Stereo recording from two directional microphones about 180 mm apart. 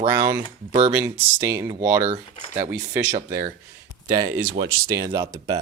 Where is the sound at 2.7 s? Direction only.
10° right (ahead or behind).